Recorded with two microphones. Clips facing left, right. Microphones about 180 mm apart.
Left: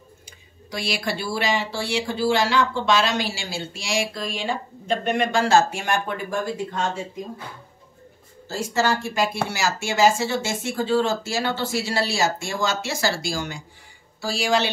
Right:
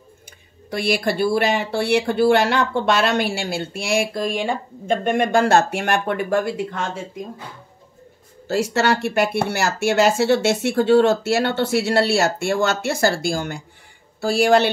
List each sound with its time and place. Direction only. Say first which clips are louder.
0.7 s speech: right 6 dB; 55° right (ahead or behind)
8.5 s speech: right 4 dB; 70° right (ahead or behind)